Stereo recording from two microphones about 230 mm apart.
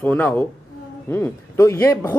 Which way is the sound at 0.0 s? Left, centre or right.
Centre.